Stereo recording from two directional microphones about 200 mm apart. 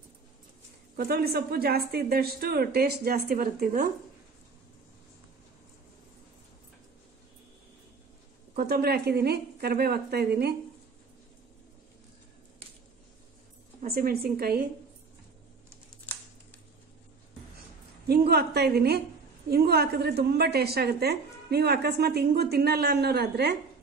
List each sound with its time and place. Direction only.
0.9 s a woman's voice: 50° right (ahead or behind)
8.5 s a woman's voice: 50° right (ahead or behind)
13.8 s a woman's voice: 50° right (ahead or behind)
18.0 s a woman's voice: 50° right (ahead or behind)